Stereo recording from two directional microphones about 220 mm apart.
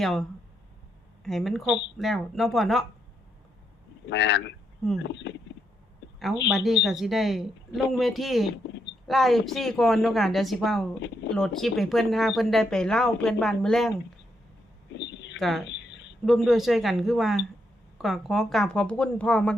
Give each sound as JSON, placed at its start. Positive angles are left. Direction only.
{"t": 0.0, "sound": "speech", "side_deg": 0}
{"t": 4.0, "sound": "speech", "side_deg": 55}
{"t": 6.7, "sound": "speech", "side_deg": 0}
{"t": 14.9, "sound": "a sound", "side_deg": 55}
{"t": 15.4, "sound": "speech", "side_deg": 0}
{"t": 15.7, "sound": "a sound", "side_deg": 55}
{"t": 16.2, "sound": "speech", "side_deg": 0}